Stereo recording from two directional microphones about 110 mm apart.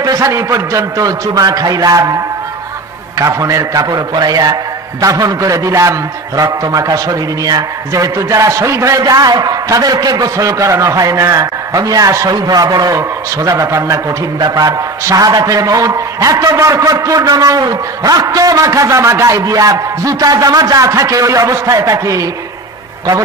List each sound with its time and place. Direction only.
0.0 s a man's voice: 30° right (ahead or behind)